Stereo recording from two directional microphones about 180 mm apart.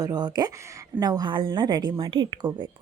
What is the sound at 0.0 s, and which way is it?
Speech, 25° right (ahead or behind).